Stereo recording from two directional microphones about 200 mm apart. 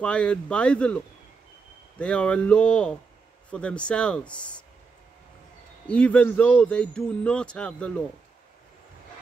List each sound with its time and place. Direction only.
0.0 s speech: 5° left (ahead or behind)
5.9 s speech: 5° left (ahead or behind)